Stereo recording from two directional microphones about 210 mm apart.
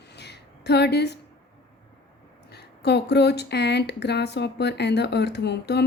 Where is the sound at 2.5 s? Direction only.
50° left (ahead or behind).